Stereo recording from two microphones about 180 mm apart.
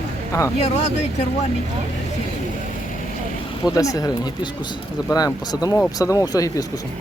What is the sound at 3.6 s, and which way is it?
Speech, 20° left (ahead or behind).